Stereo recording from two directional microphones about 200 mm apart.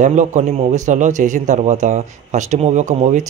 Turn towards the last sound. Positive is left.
turn(degrees=-35)  # may be behind; listen again after turning